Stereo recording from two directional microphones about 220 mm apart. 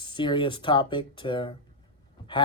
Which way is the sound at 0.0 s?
20° left (ahead or behind).